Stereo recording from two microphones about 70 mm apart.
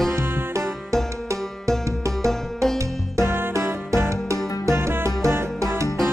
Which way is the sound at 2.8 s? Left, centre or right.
Right.